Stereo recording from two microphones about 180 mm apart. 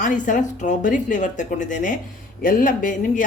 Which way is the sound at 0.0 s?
45° left (ahead or behind).